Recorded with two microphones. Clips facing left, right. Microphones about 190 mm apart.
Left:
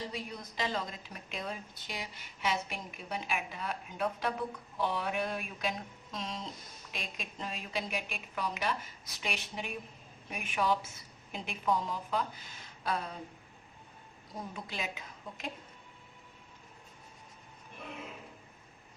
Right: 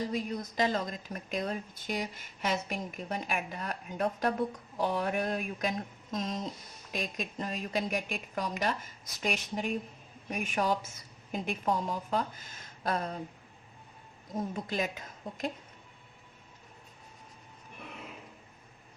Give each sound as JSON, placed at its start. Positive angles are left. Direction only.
{"t": 0.0, "sound": "a woman's voice", "side_deg": -45}
{"t": 14.5, "sound": "a woman's voice", "side_deg": -45}